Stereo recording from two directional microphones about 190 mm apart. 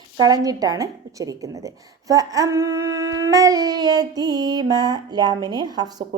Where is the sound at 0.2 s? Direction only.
20° right (ahead or behind).